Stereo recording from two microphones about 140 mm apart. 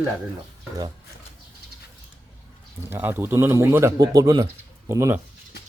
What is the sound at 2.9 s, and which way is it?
Speech, 15° right (ahead or behind).